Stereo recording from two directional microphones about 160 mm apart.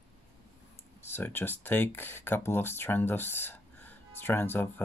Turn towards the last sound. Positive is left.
turn(degrees=15)  # may be behind; listen again after turning